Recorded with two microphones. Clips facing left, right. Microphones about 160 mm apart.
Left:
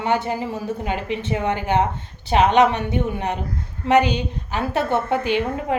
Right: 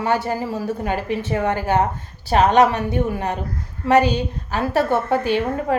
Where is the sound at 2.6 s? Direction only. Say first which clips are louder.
Right 1 dB; 20° left (ahead or behind).